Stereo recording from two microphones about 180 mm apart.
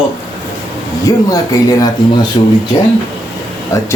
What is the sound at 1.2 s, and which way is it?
Speech, 20° left (ahead or behind).